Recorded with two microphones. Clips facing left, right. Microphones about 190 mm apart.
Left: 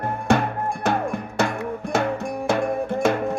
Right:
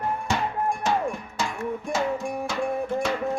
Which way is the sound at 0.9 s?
60° left (ahead or behind).